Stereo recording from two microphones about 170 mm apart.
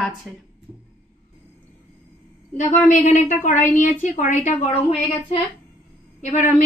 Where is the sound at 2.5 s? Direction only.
45° left (ahead or behind).